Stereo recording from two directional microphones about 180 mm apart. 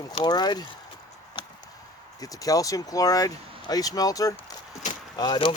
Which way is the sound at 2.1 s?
20° left (ahead or behind).